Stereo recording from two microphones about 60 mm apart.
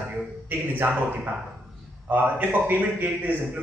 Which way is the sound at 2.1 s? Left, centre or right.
Right.